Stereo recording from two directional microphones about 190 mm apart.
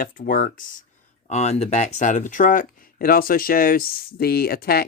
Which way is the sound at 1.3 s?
35° left (ahead or behind).